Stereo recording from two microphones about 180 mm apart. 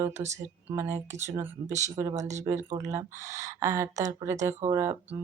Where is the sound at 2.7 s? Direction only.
20° right (ahead or behind).